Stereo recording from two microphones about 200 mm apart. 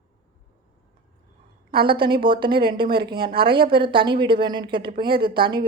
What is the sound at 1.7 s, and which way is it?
Speech, 50° right (ahead or behind).